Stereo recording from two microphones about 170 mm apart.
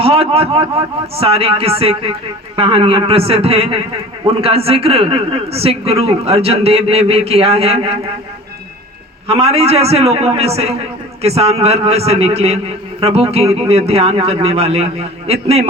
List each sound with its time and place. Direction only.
0.0 s speech: 35° right (ahead or behind)
9.2 s speech: 35° right (ahead or behind)